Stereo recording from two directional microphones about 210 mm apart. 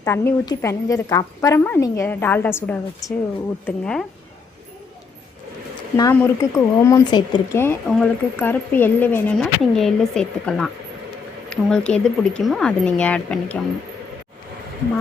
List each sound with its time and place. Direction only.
0.0 s speech: 15° left (ahead or behind)
3.7 s speech: 5° left (ahead or behind)
6.0 s speech: 15° left (ahead or behind)